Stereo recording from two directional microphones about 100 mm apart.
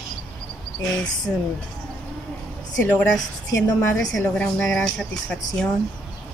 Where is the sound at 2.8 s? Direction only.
20° left (ahead or behind).